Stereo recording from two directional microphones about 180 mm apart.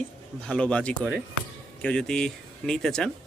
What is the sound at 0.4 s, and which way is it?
Speech, 5° left (ahead or behind).